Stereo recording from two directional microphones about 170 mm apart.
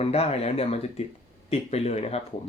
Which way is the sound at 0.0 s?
35° left (ahead or behind).